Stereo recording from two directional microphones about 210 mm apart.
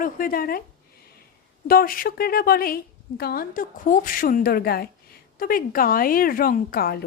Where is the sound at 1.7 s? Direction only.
45° left (ahead or behind).